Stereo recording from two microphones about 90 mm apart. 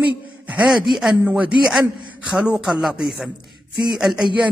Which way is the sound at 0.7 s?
5° right (ahead or behind).